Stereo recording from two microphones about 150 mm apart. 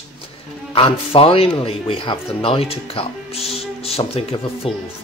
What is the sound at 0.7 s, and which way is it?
Speech, 35° left (ahead or behind).